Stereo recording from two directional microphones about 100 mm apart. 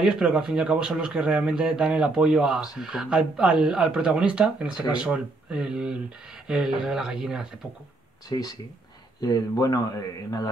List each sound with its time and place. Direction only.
0.0 s speech: 10° right (ahead or behind)
8.3 s speech: 40° left (ahead or behind)